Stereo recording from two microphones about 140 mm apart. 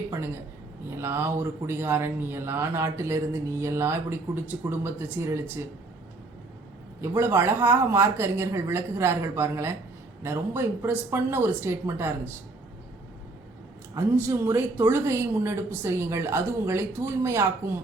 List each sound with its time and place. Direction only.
0.9 s speech: 20° right (ahead or behind)
7.2 s speech: 20° right (ahead or behind)
13.9 s speech: 20° right (ahead or behind)